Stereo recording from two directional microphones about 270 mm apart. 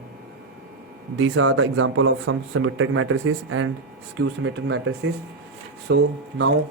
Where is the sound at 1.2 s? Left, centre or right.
Right.